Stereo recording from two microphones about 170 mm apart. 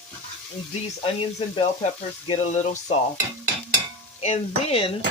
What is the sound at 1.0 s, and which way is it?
Speech, 35° left (ahead or behind).